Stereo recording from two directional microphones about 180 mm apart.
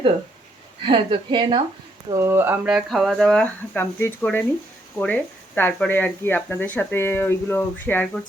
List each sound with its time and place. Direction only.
0.8 s a woman's voice: 30° right (ahead or behind)
2.1 s speech: 15° right (ahead or behind); by 8.2 s 10° left (ahead or behind)